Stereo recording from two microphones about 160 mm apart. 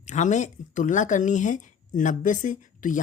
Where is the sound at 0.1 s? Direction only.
50° left (ahead or behind).